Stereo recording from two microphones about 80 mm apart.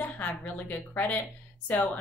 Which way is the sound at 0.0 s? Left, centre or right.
Left.